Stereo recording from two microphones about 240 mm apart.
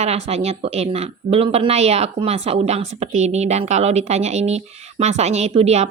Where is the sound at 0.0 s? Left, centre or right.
Right.